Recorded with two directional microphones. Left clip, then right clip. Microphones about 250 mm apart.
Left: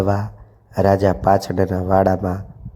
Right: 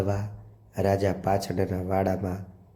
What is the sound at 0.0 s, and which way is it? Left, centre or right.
Speech, centre.